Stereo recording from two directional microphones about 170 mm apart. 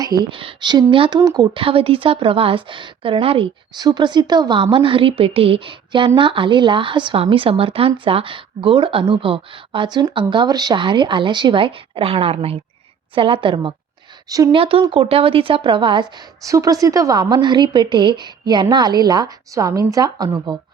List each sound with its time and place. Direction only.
0.0 s a woman's voice: 25° right (ahead or behind)
14.6 s a woman's voice: 30° right (ahead or behind)